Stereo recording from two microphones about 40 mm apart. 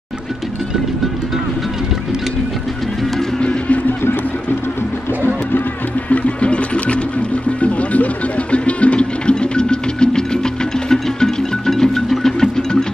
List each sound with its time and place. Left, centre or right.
3.3 s music: left
6.0 s music: left; by 12.6 s centre